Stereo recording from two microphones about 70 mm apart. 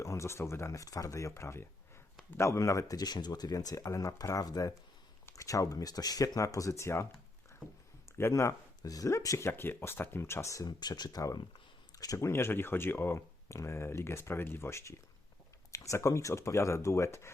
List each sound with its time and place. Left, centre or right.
0.0 s speech: left
0.8 s speech: left
3.8 s speech: left
5.4 s speech: left
8.3 s speech: left
9.5 s speech: left
10.7 s speech: left
11.9 s speech: left